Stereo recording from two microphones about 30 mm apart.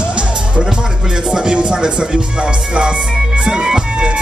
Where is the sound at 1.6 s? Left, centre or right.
Right.